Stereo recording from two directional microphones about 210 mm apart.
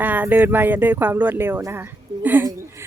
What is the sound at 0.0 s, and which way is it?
Speech, 10° right (ahead or behind).